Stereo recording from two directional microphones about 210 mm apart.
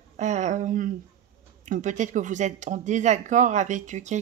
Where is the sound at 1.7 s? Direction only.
35° right (ahead or behind).